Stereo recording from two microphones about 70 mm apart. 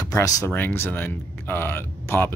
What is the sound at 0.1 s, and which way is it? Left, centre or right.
Speech, left.